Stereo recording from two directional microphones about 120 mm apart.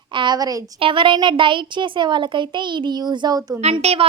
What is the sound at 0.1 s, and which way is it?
Speech, 40° right (ahead or behind).